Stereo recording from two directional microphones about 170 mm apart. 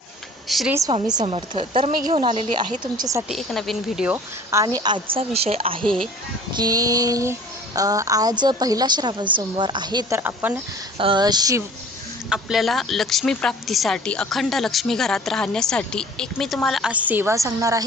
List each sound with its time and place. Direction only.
0.4 s speech: centre (ahead or behind)
0.7 s a woman's voice: 20° right (ahead or behind)
1.2 s speech: 30° right (ahead or behind)
2.6 s a woman's voice: 25° right (ahead or behind)
3.2 s speech: centre (ahead or behind)
4.6 s speech: 25° right (ahead or behind)
5.8 s speech: 5° left (ahead or behind)
6.6 s a woman's voice: 20° right (ahead or behind)
10.2 s speech: 10° right (ahead or behind)
10.9 s a woman's voice: 30° right (ahead or behind)
12.3 s speech: centre (ahead or behind); by 17.8 s 20° right (ahead or behind)